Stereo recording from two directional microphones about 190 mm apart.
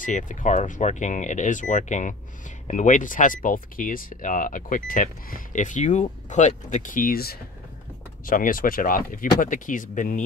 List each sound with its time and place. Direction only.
0.0 s speech: 45° left (ahead or behind)